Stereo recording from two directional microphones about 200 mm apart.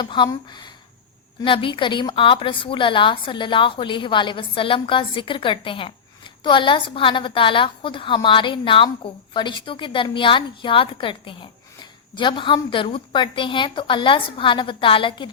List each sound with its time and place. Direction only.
0.0 s a woman's voice: 25° left (ahead or behind)